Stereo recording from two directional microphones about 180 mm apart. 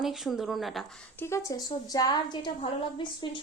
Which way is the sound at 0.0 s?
Centre (ahead or behind).